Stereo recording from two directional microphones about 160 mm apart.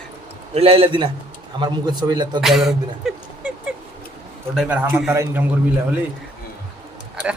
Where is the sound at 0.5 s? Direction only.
40° right (ahead or behind).